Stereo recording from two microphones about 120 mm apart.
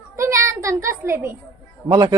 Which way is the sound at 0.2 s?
25° right (ahead or behind).